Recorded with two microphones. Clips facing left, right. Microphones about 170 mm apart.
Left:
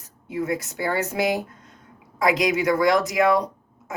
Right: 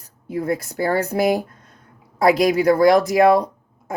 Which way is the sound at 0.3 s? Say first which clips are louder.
Right 4 dB; 35° right (ahead or behind).